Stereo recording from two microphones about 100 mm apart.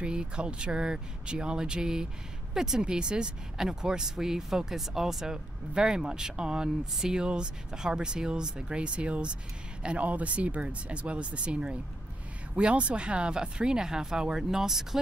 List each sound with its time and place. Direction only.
0.0 s speech: 10° right (ahead or behind)